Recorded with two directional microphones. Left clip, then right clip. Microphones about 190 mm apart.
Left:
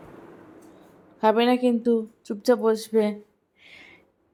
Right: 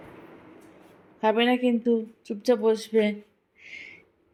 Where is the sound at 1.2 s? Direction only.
15° left (ahead or behind).